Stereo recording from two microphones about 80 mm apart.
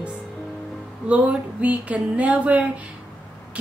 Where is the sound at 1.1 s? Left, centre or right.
Centre.